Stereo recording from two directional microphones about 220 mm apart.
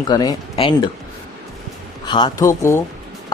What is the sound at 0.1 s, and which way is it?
Speech, 20° left (ahead or behind).